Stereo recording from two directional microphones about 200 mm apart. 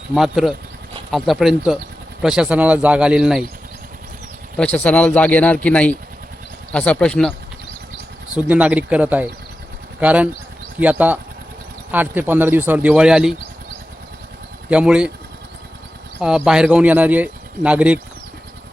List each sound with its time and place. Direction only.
0.1 s speech: centre (ahead or behind)
4.5 s speech: 5° left (ahead or behind)
8.4 s speech: 5° right (ahead or behind)
14.7 s speech: 5° right (ahead or behind)
16.1 s speech: 5° right (ahead or behind)